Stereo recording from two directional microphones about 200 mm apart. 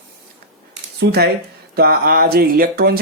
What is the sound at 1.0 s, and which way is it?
Speech, 55° right (ahead or behind).